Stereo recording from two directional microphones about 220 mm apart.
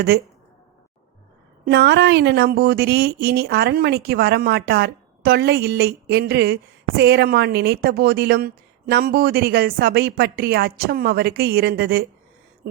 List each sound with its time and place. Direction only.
1.6 s speech: 50° right (ahead or behind)